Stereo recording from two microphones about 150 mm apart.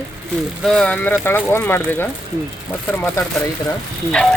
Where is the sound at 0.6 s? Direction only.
5° left (ahead or behind).